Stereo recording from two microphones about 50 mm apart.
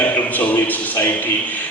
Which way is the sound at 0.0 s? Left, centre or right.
Left.